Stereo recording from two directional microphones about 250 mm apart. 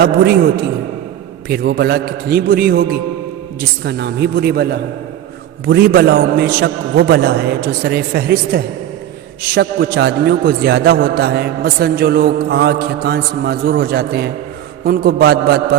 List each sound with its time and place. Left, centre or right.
1.5 s a man's voice: right